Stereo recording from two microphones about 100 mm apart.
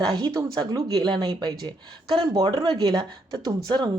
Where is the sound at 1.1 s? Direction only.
60° right (ahead or behind).